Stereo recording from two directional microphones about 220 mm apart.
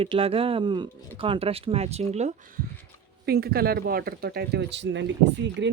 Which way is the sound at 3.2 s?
45° right (ahead or behind).